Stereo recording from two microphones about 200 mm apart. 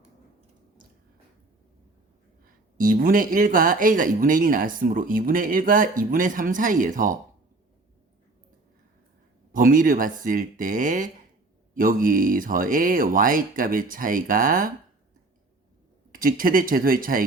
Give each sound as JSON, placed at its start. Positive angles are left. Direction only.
{"t": 2.7, "sound": "speech", "side_deg": -45}
{"t": 9.5, "sound": "speech", "side_deg": -45}
{"t": 16.1, "sound": "speech", "side_deg": -45}